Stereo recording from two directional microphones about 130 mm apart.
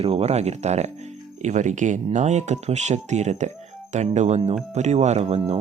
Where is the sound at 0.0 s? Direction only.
55° right (ahead or behind).